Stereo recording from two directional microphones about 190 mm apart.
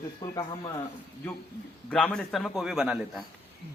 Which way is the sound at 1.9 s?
5° left (ahead or behind).